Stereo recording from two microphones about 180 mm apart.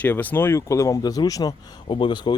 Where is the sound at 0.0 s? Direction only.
10° left (ahead or behind).